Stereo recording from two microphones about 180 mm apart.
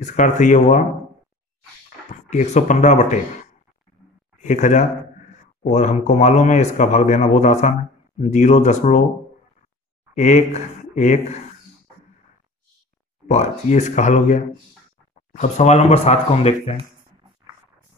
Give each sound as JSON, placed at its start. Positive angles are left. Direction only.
{"t": 0.0, "sound": "speech", "side_deg": 45}
{"t": 2.2, "sound": "speech", "side_deg": 40}
{"t": 4.4, "sound": "speech", "side_deg": 40}
{"t": 10.1, "sound": "speech", "side_deg": 40}
{"t": 13.3, "sound": "speech", "side_deg": 40}